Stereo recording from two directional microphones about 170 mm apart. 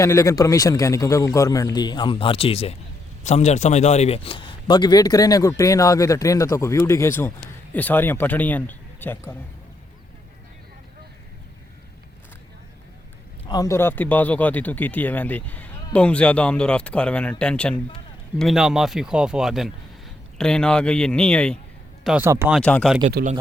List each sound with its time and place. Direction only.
0.0 s speech: 20° left (ahead or behind)
13.5 s a man's voice: 20° left (ahead or behind)
22.0 s speech: 5° right (ahead or behind)
22.5 s a man's voice: 5° left (ahead or behind)